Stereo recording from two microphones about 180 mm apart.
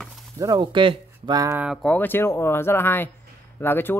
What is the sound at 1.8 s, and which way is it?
Speech, 10° left (ahead or behind).